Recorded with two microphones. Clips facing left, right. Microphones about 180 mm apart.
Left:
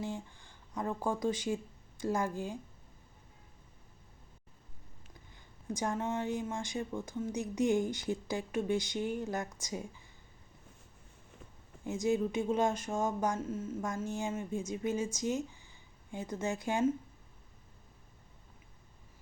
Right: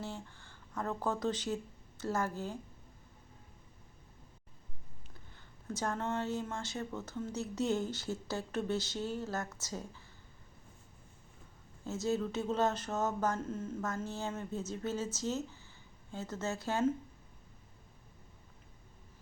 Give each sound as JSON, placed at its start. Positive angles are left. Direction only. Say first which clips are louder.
{"t": 0.0, "sound": "a woman's voice", "louder": "left 4 dB", "side_deg": 15}
{"t": 5.6, "sound": "a woman's voice", "louder": "left 2 dB", "side_deg": 15}
{"t": 11.9, "sound": "a woman's voice", "louder": "left 3 dB", "side_deg": 15}